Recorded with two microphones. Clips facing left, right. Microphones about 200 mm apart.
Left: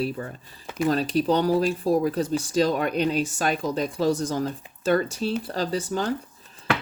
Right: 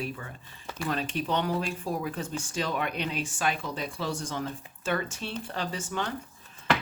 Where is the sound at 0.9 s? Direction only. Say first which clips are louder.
Left 7 dB; 35° left (ahead or behind).